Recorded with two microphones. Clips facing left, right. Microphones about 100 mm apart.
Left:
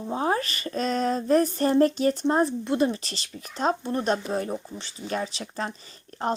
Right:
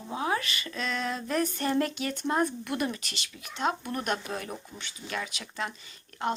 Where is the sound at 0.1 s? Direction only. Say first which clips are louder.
Left 4 dB; 40° left (ahead or behind).